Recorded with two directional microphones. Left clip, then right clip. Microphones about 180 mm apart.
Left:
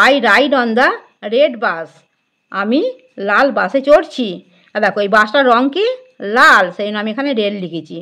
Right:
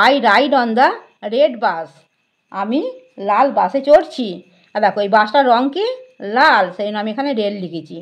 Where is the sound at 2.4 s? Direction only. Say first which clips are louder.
Left 4 dB; 35° left (ahead or behind).